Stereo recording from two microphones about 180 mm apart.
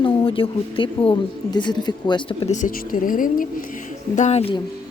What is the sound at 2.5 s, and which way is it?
Speech, 45° left (ahead or behind).